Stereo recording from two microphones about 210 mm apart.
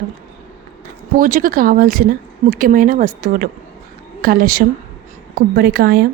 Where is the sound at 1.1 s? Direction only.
40° right (ahead or behind).